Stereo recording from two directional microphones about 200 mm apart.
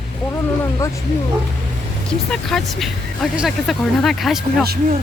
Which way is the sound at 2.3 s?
Centre (ahead or behind).